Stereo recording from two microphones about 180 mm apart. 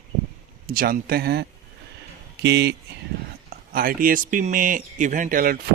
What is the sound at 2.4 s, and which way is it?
Speech, 65° right (ahead or behind).